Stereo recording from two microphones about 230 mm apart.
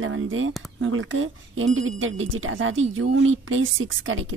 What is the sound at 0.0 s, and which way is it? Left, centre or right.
Speech, right.